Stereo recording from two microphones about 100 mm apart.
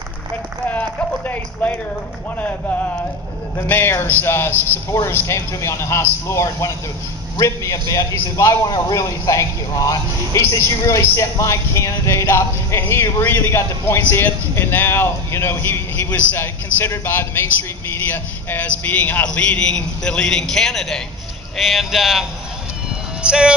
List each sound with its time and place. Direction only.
0.7 s speech: 15° left (ahead or behind)
3.6 s a man's voice: 20° left (ahead or behind); by 22.2 s centre (ahead or behind)
23.2 s music: 10° right (ahead or behind)